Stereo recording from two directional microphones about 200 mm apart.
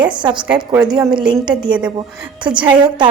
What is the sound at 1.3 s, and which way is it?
Speech, 20° right (ahead or behind).